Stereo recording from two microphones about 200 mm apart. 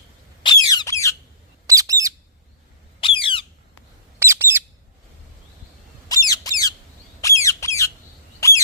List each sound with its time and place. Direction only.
0.7 s squawk: 15° left (ahead or behind)
1.6 s bird: 15° right (ahead or behind)
3.0 s squawk: 25° left (ahead or behind)
4.2 s bird: 10° right (ahead or behind)
6.1 s squawk: 20° left (ahead or behind)
8.4 s rodents: 15° left (ahead or behind)